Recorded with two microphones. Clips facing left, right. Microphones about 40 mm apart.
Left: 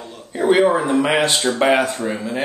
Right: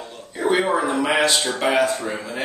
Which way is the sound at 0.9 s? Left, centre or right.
Centre.